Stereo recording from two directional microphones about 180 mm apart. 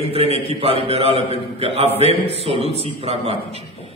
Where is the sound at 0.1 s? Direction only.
35° right (ahead or behind).